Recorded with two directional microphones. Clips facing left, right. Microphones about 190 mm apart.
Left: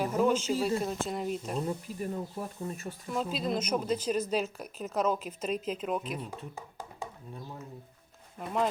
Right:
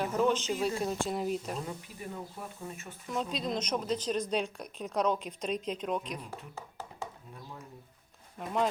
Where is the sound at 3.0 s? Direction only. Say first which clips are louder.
Left 2 dB; 5° left (ahead or behind).